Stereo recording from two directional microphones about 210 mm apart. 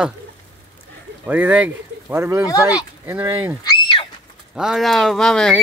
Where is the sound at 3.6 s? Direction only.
20° left (ahead or behind).